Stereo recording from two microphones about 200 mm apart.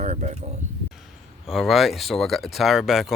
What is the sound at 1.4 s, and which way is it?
Speech, centre (ahead or behind).